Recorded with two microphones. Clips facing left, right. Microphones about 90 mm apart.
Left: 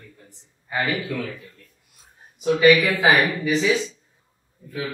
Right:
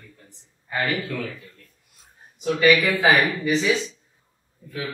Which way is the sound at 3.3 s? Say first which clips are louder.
Left 1 dB; 5° left (ahead or behind).